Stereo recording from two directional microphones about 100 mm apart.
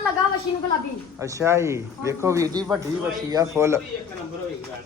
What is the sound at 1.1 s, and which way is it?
Speech, 30° right (ahead or behind).